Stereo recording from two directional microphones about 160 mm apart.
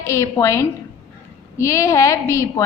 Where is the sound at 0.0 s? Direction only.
20° left (ahead or behind).